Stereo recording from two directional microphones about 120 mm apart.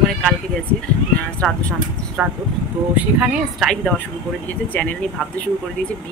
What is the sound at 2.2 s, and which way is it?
Speech, 10° right (ahead or behind).